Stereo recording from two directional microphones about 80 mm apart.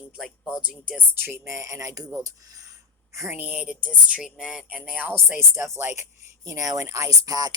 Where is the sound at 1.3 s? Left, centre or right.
Right.